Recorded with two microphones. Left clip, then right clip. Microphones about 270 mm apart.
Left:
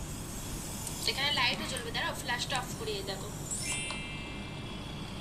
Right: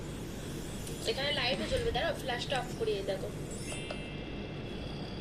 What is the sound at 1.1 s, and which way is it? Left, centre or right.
A woman's voice, left.